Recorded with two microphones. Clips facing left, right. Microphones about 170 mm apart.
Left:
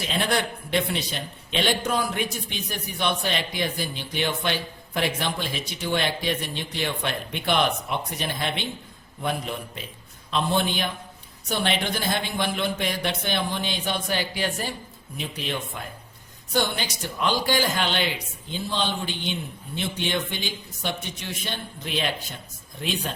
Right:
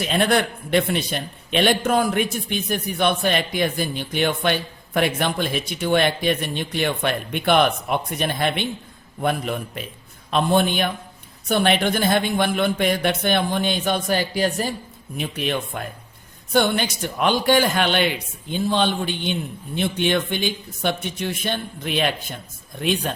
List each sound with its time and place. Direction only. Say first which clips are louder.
0.1 s a man's voice: right 5 dB; 55° right (ahead or behind)
15.4 s speech: right 6 dB; 60° right (ahead or behind)